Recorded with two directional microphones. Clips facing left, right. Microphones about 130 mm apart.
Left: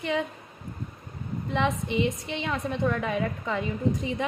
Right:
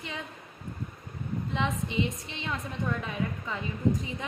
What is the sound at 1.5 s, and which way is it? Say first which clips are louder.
A woman's voice: left 6 dB; 65° left (ahead or behind).